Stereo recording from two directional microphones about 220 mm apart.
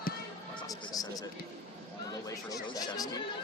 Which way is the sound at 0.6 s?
15° left (ahead or behind).